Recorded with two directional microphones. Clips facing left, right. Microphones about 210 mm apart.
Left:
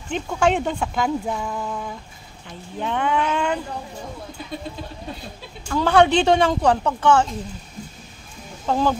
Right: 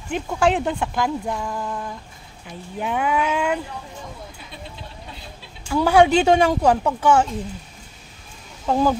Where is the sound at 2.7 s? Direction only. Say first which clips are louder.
Even; 10° right (ahead or behind).